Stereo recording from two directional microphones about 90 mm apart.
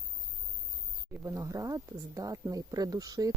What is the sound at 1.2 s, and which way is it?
Speech, 35° right (ahead or behind).